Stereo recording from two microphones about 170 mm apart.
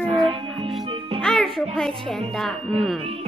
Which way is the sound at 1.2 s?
5° left (ahead or behind).